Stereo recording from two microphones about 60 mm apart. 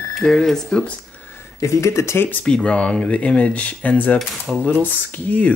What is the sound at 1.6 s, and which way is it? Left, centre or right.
Speech, left.